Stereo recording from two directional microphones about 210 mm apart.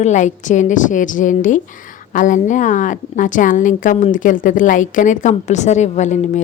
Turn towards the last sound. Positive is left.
turn(degrees=35)  # may be behind; listen again after turning